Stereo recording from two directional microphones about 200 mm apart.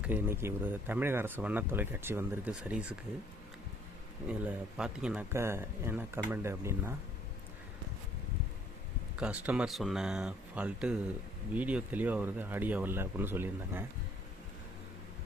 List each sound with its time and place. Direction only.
0.0 s speech: 10° right (ahead or behind)
4.3 s speech: 5° right (ahead or behind)
9.1 s speech: 5° right (ahead or behind)